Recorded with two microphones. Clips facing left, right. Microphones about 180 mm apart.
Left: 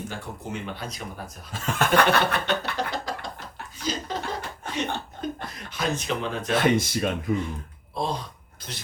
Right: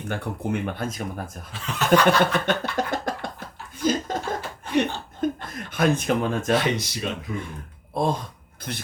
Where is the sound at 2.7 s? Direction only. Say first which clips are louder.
Right 4 dB; 50° right (ahead or behind).